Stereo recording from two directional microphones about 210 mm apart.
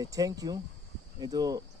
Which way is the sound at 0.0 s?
15° right (ahead or behind).